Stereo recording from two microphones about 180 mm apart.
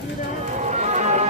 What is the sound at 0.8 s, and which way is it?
Music, 40° right (ahead or behind).